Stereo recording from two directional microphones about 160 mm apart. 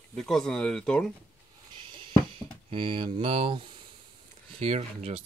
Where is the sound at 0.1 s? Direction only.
Centre (ahead or behind).